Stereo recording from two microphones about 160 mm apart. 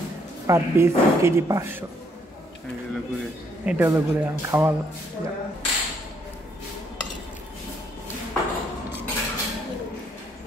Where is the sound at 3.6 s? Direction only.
15° right (ahead or behind).